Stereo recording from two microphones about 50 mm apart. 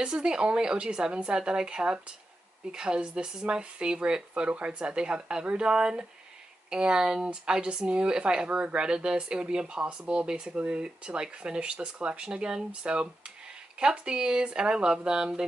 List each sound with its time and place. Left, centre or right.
0.0 s speech: centre